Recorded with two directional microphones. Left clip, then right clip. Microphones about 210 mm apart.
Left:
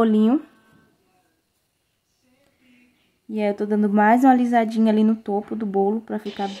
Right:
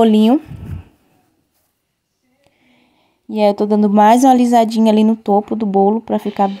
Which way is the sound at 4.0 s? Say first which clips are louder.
Right 6 dB; 35° right (ahead or behind).